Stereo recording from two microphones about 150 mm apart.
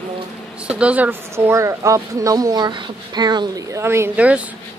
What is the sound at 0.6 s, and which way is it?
Speech, 10° right (ahead or behind).